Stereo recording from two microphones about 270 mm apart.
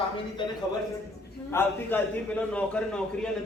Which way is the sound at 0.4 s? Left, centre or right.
Centre.